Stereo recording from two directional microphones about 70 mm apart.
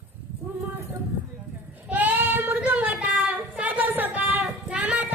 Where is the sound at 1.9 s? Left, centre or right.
Right.